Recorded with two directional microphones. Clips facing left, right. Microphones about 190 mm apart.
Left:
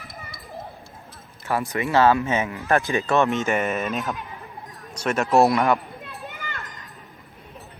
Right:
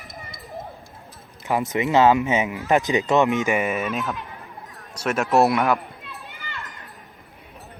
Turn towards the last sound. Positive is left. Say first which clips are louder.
# left 3 dB
turn(degrees=50)  # may be behind; listen again after turning